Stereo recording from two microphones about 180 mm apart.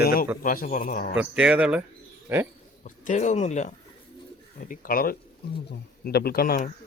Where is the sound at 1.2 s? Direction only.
5° right (ahead or behind).